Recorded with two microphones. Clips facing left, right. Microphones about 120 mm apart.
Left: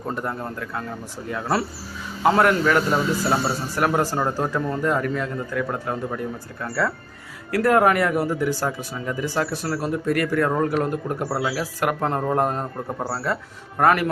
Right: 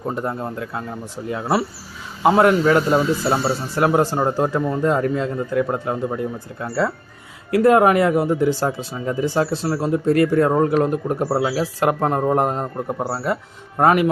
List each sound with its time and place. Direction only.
0.1 s speech: 20° right (ahead or behind)